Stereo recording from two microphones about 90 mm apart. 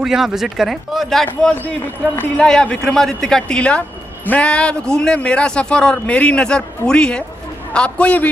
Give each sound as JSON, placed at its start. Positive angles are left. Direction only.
{"t": 0.0, "sound": "speech", "side_deg": -5}
{"t": 1.2, "sound": "a man's voice", "side_deg": 15}